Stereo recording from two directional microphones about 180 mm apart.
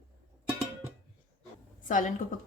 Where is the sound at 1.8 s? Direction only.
45° left (ahead or behind).